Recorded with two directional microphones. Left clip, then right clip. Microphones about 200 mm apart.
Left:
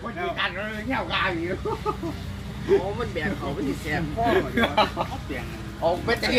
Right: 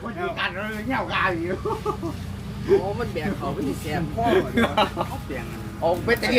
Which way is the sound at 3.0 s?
40° right (ahead or behind).